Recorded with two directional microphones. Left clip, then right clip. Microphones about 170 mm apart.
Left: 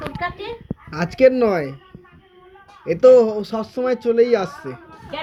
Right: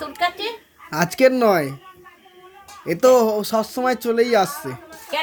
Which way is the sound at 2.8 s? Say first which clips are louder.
Left 3 dB; 45° right (ahead or behind).